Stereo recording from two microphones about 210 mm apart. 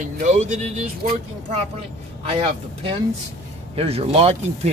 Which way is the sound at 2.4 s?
30° right (ahead or behind).